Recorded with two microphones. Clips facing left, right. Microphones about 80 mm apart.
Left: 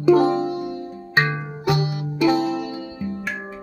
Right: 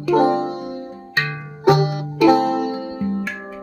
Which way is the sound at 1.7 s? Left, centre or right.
Right.